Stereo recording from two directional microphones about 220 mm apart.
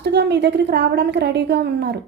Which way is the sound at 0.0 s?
50° right (ahead or behind).